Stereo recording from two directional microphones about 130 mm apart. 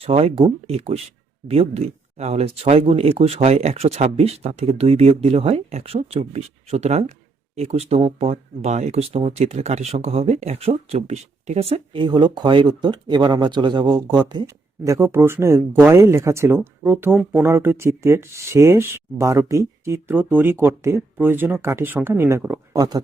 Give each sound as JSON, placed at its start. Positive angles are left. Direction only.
{"t": 0.0, "sound": "speech", "side_deg": -50}
{"t": 12.0, "sound": "speech", "side_deg": -35}
{"t": 22.7, "sound": "speech", "side_deg": -30}